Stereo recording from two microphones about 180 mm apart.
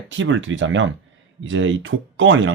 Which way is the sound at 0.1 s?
90° right.